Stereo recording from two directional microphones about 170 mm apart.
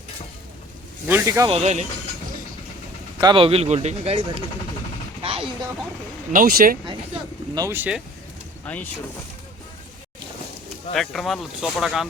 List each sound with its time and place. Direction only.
1.0 s speech: 15° right (ahead or behind)
1.5 s speech: 40° right (ahead or behind)
3.2 s speech: 30° right (ahead or behind)
5.2 s a sound: 35° right (ahead or behind)
6.3 s speech: 55° right (ahead or behind)
7.5 s speech: 15° right (ahead or behind)
8.6 s speech: 10° left (ahead or behind)
10.9 s speech: centre (ahead or behind)